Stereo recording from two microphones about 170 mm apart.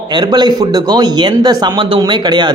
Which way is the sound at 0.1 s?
25° right (ahead or behind).